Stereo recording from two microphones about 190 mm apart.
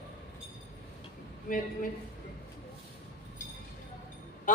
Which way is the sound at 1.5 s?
45° left (ahead or behind).